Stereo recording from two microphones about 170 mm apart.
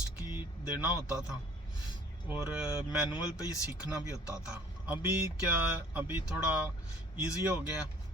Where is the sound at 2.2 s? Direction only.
10° right (ahead or behind).